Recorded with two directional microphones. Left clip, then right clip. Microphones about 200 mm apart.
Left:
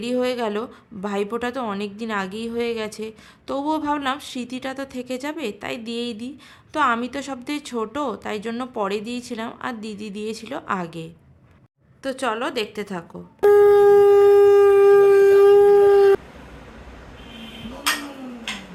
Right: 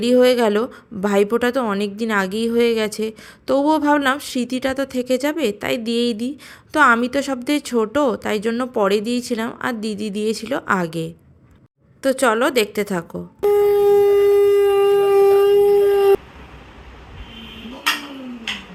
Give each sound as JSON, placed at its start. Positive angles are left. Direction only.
{"t": 0.0, "sound": "a woman's voice", "side_deg": -15}
{"t": 13.4, "sound": "shofar", "side_deg": 5}